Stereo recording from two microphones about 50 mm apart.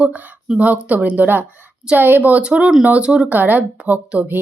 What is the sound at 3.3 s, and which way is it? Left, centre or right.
Speech, right.